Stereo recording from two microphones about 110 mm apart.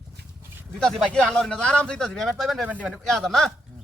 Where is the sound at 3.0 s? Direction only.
5° left (ahead or behind).